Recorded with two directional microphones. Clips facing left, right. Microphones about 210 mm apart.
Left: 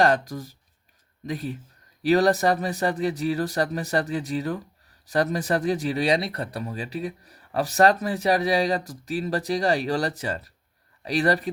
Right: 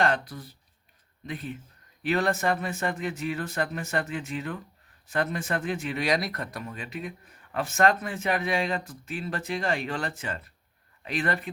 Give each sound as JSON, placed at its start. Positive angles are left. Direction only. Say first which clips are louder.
{"t": 0.0, "sound": "speech", "louder": "left 5 dB", "side_deg": 40}